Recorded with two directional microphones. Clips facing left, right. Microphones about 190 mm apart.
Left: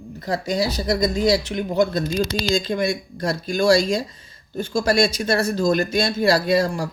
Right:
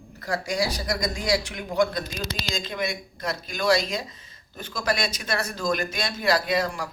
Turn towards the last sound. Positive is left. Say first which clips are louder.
# left 6 dB
turn(degrees=30)  # may be behind; listen again after turning